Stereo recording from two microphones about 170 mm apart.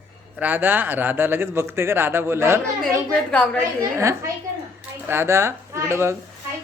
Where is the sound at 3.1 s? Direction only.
5° left (ahead or behind).